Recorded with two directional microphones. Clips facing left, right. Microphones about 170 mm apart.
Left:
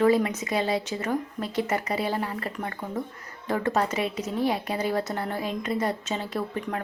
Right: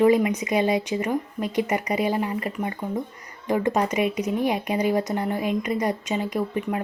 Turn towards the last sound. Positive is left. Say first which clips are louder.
# right 4 dB
turn(degrees=-15)  # may be behind; listen again after turning